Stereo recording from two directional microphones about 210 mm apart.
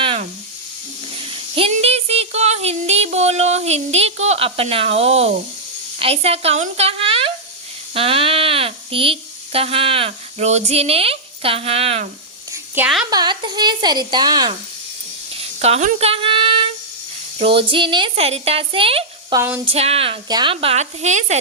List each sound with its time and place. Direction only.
0.0 s hiss: 25° right (ahead or behind)
1.3 s child singing: 25° right (ahead or behind)
6.0 s a woman's voice: 30° right (ahead or behind)
12.7 s a woman's voice: 5° right (ahead or behind)
13.1 s a woman's voice: 20° right (ahead or behind)
15.4 s a sound: 30° right (ahead or behind)
17.3 s a woman's voice: 25° right (ahead or behind)
19.4 s speech: 10° right (ahead or behind)
19.6 s a woman's voice: 30° right (ahead or behind)